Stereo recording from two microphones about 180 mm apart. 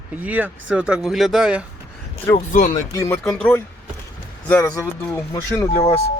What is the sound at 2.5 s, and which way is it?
Speech, 45° left (ahead or behind).